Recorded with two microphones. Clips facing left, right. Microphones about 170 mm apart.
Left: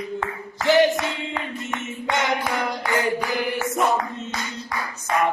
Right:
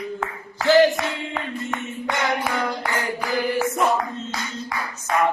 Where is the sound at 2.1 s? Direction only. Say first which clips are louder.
Left 1 dB; 20° left (ahead or behind).